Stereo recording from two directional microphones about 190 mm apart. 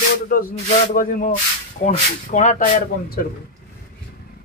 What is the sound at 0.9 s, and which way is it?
Speech, 45° left (ahead or behind).